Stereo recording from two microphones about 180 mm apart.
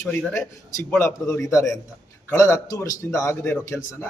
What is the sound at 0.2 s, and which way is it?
Speech, 5° left (ahead or behind).